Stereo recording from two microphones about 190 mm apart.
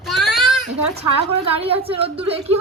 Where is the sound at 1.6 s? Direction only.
30° right (ahead or behind).